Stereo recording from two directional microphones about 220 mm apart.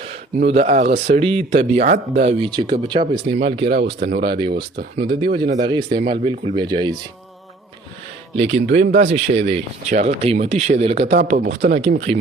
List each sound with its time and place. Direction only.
0.0 s speech: 30° right (ahead or behind)
3.7 s a man's voice: 45° right (ahead or behind)
4.2 s speech: 20° right (ahead or behind)
4.5 s speech: 40° right (ahead or behind)
5.6 s speech: 20° right (ahead or behind)
8.4 s speech: 30° right (ahead or behind)